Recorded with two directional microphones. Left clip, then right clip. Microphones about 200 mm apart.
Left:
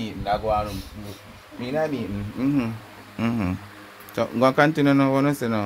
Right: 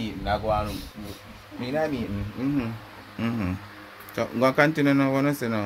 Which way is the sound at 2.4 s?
55° left (ahead or behind).